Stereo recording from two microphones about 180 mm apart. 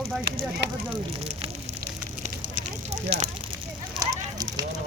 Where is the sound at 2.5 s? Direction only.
40° right (ahead or behind).